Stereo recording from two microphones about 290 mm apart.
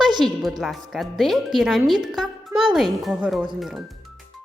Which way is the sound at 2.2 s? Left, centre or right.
Centre.